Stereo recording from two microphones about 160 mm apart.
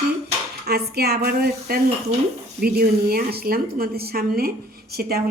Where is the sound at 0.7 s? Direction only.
80° right.